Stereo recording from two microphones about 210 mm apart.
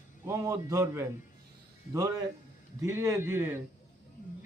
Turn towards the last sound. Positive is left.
turn(degrees=-10)  # may be behind; listen again after turning